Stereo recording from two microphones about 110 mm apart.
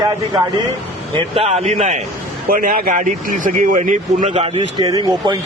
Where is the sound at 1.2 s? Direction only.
60° right (ahead or behind); by 2.0 s 90° right.